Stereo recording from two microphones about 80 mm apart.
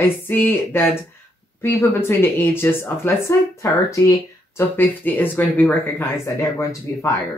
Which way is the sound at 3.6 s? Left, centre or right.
Left.